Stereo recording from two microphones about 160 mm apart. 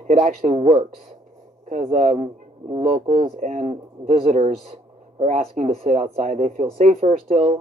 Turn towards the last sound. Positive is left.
turn(degrees=-45)  # may be behind; listen again after turning